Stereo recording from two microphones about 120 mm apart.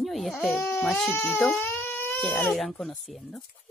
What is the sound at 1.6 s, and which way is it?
Goat, 15° left (ahead or behind).